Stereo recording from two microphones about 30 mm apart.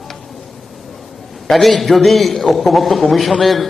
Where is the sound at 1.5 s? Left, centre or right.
Centre.